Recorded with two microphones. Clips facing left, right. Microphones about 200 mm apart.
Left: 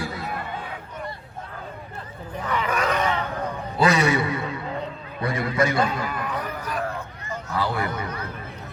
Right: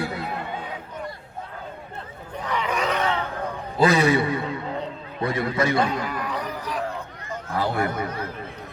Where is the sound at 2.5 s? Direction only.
10° left (ahead or behind).